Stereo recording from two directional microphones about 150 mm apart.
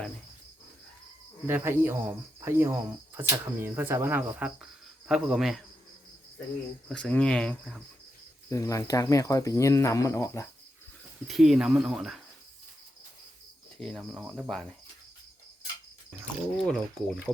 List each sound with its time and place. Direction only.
1.5 s speech: 15° right (ahead or behind)
6.8 s speech: 5° left (ahead or behind)
8.4 s speech: 20° left (ahead or behind)
11.3 s speech: centre (ahead or behind)
13.8 s speech: centre (ahead or behind)
16.2 s speech: 5° left (ahead or behind)